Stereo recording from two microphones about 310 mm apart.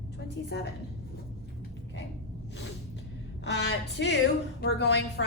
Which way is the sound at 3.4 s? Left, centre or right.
Left.